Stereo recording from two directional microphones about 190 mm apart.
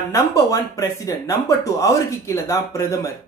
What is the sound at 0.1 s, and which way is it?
Speech, 15° left (ahead or behind).